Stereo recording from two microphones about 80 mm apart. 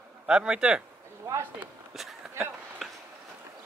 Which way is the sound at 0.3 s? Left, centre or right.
Centre.